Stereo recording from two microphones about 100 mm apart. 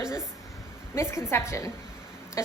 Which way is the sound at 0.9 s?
30° left (ahead or behind).